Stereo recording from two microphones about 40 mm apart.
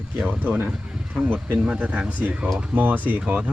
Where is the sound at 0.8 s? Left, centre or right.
Right.